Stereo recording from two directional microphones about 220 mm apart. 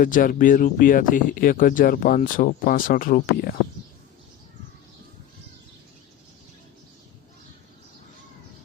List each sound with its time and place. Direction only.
0.0 s speech: 40° left (ahead or behind)